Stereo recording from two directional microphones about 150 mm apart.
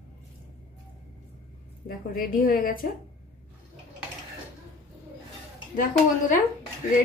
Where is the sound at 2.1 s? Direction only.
70° left (ahead or behind).